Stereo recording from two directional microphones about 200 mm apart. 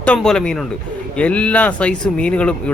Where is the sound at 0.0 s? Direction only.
5° left (ahead or behind).